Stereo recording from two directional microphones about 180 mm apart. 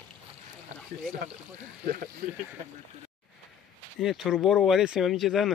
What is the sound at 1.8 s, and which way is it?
Speech, 50° right (ahead or behind).